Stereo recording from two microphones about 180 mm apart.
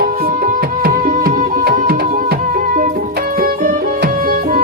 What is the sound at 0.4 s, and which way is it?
Music, 55° right (ahead or behind).